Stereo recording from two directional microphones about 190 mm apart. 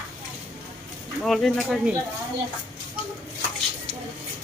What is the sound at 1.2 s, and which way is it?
Speech, centre (ahead or behind).